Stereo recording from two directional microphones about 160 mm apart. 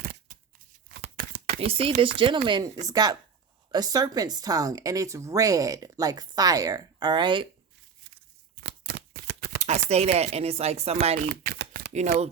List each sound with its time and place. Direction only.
1.1 s whispering: 65° right (ahead or behind)
1.5 s speech: 35° right (ahead or behind)
8.6 s shuffling cards: 85° right
9.6 s speech: 45° right (ahead or behind)
11.3 s shuffling cards: 80° right